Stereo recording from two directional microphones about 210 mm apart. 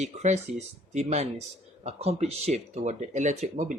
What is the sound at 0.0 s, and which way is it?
A man's voice, 35° right (ahead or behind).